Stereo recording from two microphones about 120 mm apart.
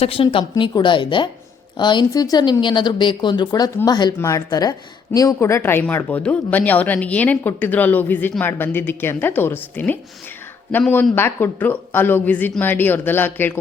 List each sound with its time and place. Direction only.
0.0 s speech: 50° left (ahead or behind)
0.5 s a woman's voice: 35° left (ahead or behind); by 10.0 s 15° left (ahead or behind)
11.1 s a woman's voice: 20° left (ahead or behind)